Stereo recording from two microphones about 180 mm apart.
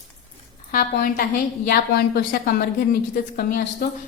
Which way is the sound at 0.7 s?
50° left (ahead or behind).